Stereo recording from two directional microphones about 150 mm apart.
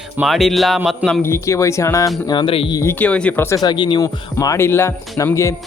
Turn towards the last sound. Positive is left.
turn(degrees=20)  # may be behind; listen again after turning